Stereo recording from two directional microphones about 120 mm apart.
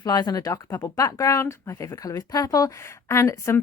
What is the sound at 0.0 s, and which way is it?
Speech, 35° left (ahead or behind).